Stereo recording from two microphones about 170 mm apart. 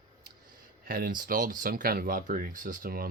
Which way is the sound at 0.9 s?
60° right (ahead or behind).